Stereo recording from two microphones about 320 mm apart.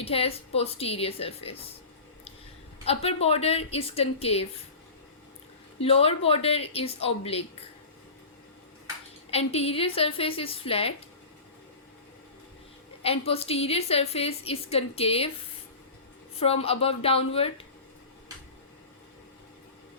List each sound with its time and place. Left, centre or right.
0.0 s a woman's voice: centre
2.8 s a woman's voice: centre
5.8 s a woman's voice: centre
9.3 s a woman's voice: centre
13.0 s a woman's voice: centre
16.4 s a woman's voice: centre